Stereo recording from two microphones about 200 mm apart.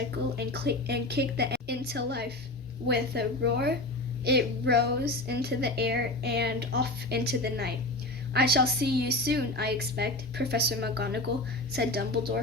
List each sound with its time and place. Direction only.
0.3 s a woman's voice: 55° right (ahead or behind)